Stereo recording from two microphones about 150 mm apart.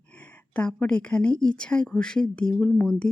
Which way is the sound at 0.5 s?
10° left (ahead or behind).